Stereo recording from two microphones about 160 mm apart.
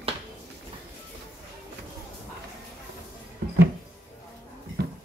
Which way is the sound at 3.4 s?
85° right.